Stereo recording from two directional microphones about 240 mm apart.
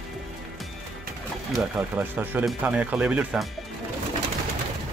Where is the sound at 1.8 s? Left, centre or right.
Centre.